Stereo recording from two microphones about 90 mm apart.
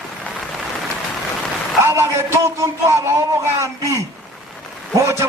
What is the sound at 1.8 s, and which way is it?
A man's voice, 30° right (ahead or behind).